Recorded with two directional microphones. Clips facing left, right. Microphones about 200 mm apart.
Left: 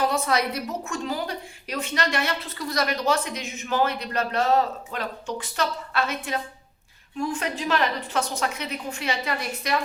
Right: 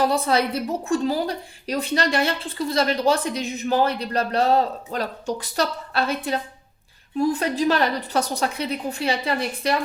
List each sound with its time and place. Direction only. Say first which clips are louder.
0.1 s a woman's voice: right 3 dB; 30° right (ahead or behind)